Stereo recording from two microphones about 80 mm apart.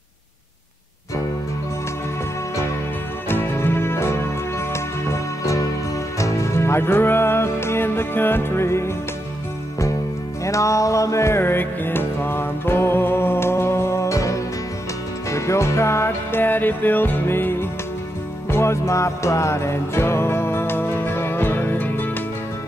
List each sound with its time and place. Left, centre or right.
3.3 s music: left
10.4 s music: left